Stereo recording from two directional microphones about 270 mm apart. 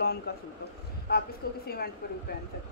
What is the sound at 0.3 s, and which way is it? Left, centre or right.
A woman's voice, left.